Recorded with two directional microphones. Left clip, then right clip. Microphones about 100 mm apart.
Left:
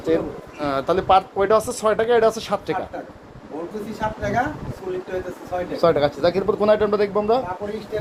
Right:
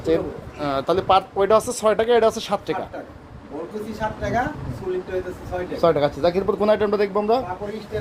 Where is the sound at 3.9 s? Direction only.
15° left (ahead or behind).